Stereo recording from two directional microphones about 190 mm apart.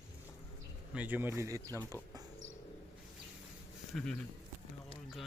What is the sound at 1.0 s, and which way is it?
Speech, 10° right (ahead or behind).